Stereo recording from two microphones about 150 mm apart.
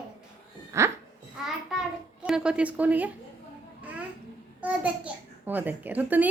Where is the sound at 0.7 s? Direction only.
20° right (ahead or behind).